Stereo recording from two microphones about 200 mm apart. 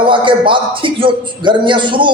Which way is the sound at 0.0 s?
25° right (ahead or behind).